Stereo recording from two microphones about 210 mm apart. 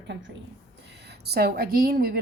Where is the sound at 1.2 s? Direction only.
50° right (ahead or behind).